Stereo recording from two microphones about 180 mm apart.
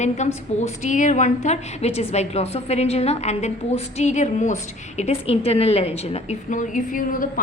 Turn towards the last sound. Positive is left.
turn(degrees=50)  # may be behind; listen again after turning